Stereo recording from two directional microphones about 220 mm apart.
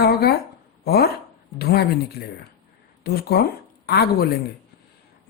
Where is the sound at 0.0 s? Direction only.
45° left (ahead or behind).